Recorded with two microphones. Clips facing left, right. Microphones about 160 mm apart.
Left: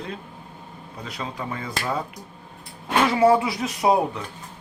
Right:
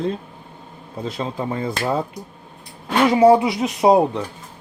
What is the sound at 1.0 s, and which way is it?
Speech, 25° right (ahead or behind).